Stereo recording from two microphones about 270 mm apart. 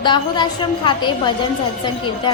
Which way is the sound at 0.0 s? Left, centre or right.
Centre.